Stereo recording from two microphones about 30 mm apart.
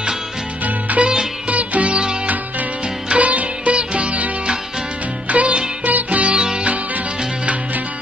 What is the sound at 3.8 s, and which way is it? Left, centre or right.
Music, right.